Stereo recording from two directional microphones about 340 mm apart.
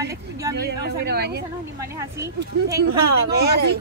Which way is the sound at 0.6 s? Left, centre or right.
Right.